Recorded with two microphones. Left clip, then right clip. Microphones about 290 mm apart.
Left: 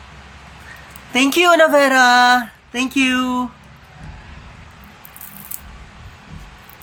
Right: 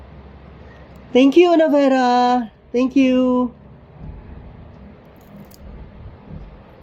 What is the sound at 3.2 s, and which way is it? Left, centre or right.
Speech, left.